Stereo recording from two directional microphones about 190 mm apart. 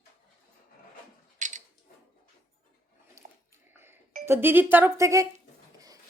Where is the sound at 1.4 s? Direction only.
40° right (ahead or behind).